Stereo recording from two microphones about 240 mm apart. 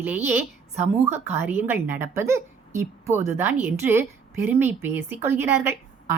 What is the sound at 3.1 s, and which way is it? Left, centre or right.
Speech, right.